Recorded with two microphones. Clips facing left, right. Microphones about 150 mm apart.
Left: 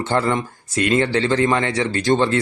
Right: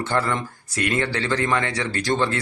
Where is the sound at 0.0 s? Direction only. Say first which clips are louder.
Left 4 dB; 20° left (ahead or behind).